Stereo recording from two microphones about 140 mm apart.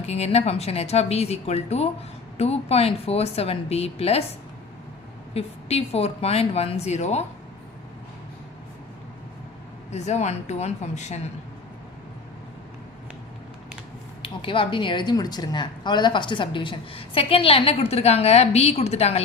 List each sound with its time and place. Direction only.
0.0 s speech: 50° left (ahead or behind)
5.3 s speech: 45° left (ahead or behind)
9.9 s speech: 55° left (ahead or behind)
14.2 s speech: 40° left (ahead or behind)